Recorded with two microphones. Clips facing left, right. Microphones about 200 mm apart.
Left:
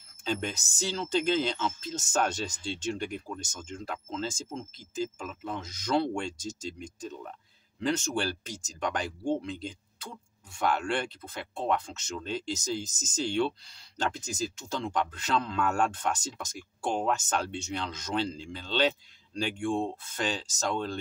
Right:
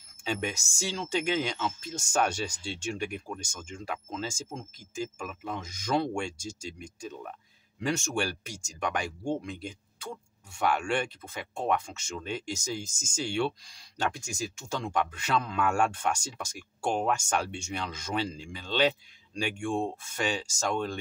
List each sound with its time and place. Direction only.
0.3 s speech: 10° right (ahead or behind)